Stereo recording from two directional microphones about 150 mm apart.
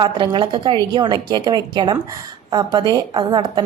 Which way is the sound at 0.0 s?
30° right (ahead or behind).